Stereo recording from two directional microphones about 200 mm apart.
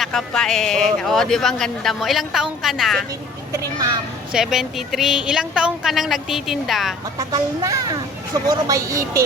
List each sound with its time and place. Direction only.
0.0 s a woman's voice: centre (ahead or behind)
4.3 s a woman's voice: 5° right (ahead or behind)
7.2 s speech: 20° right (ahead or behind)